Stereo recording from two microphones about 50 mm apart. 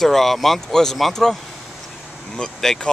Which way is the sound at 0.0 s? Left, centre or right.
Centre.